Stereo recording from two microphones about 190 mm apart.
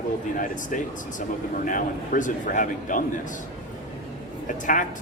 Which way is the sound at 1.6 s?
45° left (ahead or behind).